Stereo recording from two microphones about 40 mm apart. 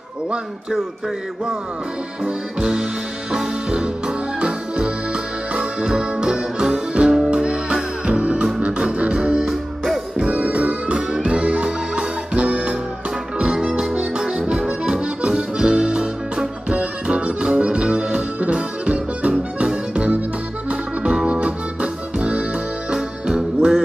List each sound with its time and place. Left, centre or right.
2.6 s music: centre
4.5 s music: right
9.4 s music: centre
10.1 s music: right
13.4 s accordion: right
21.3 s music: right
22.9 s music: centre